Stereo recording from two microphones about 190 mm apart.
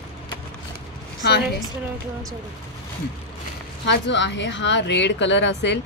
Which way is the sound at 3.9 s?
70° left (ahead or behind).